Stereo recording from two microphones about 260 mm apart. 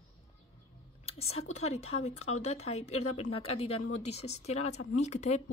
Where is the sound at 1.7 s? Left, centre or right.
Left.